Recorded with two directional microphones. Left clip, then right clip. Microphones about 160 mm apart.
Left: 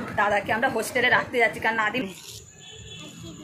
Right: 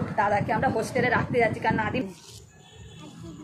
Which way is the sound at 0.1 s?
Centre (ahead or behind).